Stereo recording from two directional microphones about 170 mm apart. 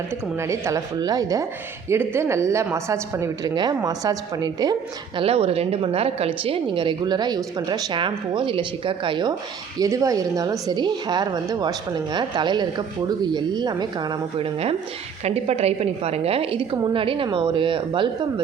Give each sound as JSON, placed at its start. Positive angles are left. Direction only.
{"t": 0.3, "sound": "a woman's voice", "side_deg": -15}